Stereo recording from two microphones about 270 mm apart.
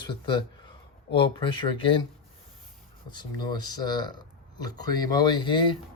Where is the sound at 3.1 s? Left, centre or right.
Centre.